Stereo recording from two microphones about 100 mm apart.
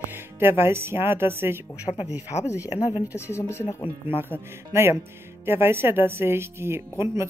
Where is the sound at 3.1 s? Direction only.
25° left (ahead or behind).